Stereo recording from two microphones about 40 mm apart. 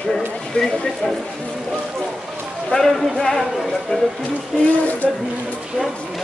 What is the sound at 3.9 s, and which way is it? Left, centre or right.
Speech, left.